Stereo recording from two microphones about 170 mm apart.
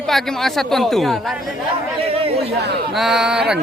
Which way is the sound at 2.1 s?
35° right (ahead or behind).